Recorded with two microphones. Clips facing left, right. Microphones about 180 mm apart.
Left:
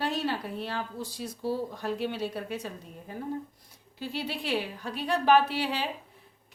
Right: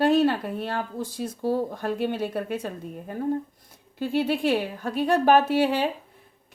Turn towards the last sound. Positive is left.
turn(degrees=-50)  # may be behind; listen again after turning